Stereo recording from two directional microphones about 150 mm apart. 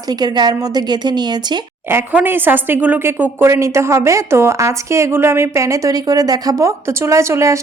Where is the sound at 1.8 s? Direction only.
15° right (ahead or behind).